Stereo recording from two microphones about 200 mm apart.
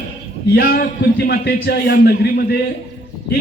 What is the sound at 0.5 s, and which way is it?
A man's voice, 50° left (ahead or behind).